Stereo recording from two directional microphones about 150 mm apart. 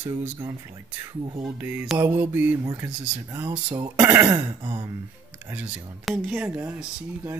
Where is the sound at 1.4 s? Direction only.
10° right (ahead or behind).